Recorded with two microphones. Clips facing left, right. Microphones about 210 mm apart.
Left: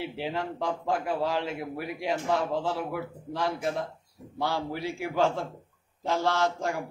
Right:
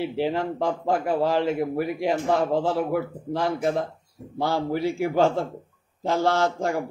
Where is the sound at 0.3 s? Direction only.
50° right (ahead or behind).